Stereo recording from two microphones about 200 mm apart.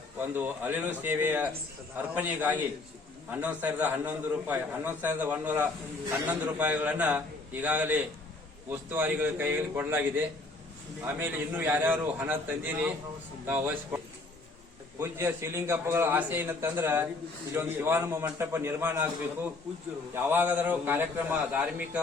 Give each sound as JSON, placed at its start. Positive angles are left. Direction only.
{"t": 0.2, "sound": "a man's voice", "side_deg": -10}